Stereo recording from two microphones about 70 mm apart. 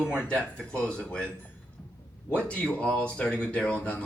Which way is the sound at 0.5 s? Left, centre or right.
Centre.